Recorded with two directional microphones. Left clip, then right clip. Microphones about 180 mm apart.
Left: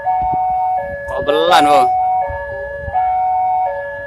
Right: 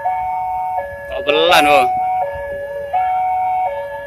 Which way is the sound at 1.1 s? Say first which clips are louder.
Even; 15° left (ahead or behind).